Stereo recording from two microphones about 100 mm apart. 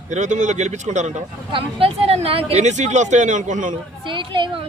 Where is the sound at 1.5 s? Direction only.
70° right (ahead or behind).